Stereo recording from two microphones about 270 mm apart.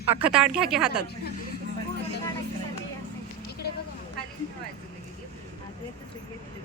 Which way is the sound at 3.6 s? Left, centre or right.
Left.